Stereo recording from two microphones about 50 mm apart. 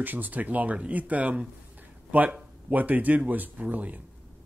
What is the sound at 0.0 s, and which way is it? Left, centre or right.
Speech, right.